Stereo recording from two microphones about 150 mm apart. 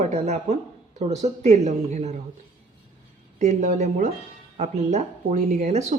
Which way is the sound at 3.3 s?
50° right (ahead or behind).